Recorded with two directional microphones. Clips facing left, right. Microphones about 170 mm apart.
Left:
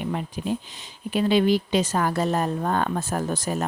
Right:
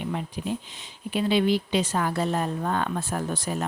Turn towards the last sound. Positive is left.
turn(degrees=45)  # may be behind; listen again after turning